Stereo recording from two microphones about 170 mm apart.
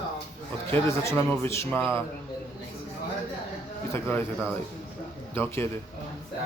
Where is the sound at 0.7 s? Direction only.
15° left (ahead or behind).